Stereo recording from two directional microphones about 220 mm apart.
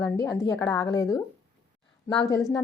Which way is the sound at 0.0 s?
15° left (ahead or behind).